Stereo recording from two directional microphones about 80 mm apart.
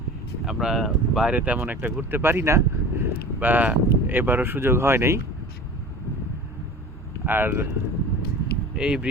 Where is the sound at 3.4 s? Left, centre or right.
Right.